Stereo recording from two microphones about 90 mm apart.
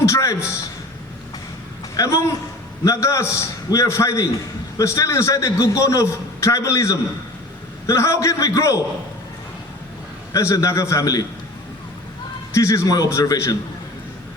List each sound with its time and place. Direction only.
0.0 s a sound: 35° left (ahead or behind)
2.0 s a man's voice: 35° left (ahead or behind)
10.3 s a man's voice: 35° left (ahead or behind)
12.5 s a man's voice: 35° left (ahead or behind)